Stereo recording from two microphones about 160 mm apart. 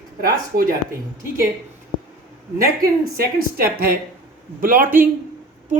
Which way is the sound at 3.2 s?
65° right (ahead or behind).